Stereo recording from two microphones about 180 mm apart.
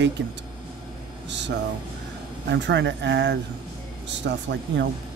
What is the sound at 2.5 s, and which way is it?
Speech, 80° right.